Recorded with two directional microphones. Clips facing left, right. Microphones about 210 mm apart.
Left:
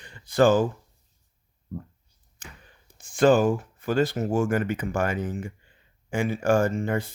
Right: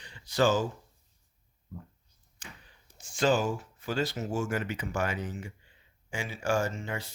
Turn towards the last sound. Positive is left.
turn(degrees=50)  # may be behind; listen again after turning